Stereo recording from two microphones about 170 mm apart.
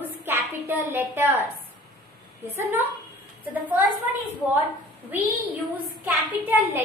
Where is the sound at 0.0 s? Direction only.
10° right (ahead or behind).